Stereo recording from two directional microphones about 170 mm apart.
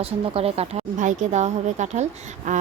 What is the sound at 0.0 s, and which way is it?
A woman's voice, 35° right (ahead or behind).